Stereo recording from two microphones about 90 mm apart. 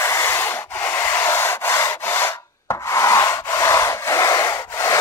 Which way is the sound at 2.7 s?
35° left (ahead or behind).